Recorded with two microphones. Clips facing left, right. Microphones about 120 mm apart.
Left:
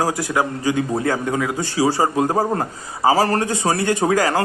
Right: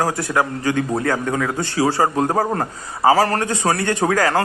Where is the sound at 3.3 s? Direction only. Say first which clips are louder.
Left 1 dB; 30° left (ahead or behind).